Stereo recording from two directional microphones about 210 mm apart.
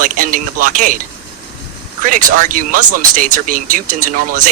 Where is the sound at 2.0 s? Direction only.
40° right (ahead or behind).